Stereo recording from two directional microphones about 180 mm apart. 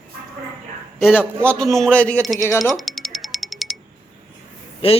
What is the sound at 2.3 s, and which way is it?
Speech, 15° left (ahead or behind).